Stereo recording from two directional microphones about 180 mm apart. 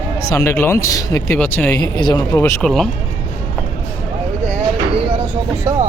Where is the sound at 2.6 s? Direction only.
Centre (ahead or behind).